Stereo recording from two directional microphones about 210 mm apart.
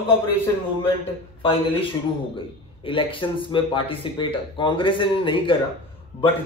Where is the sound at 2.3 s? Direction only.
25° left (ahead or behind).